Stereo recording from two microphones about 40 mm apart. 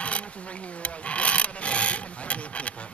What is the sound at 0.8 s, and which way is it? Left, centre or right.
Rub, left.